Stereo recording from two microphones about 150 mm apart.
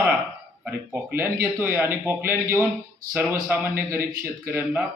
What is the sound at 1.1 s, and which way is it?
A man's voice, 15° right (ahead or behind).